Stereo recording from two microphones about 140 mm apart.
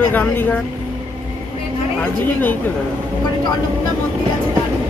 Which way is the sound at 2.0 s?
15° left (ahead or behind).